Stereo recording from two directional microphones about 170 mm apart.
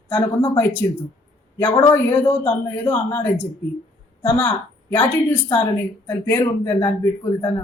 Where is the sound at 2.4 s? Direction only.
15° left (ahead or behind).